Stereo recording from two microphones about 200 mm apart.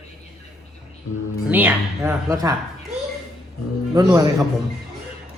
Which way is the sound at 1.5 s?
10° right (ahead or behind).